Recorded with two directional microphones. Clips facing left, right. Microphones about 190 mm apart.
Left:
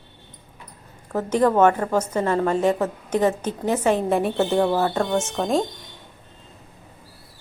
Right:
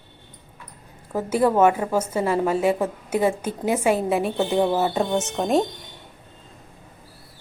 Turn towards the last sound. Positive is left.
turn(degrees=0)  # may be behind; listen again after turning